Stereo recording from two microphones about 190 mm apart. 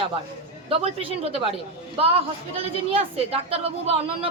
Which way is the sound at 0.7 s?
30° right (ahead or behind).